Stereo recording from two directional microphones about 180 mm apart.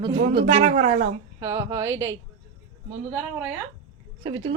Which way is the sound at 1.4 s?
15° right (ahead or behind).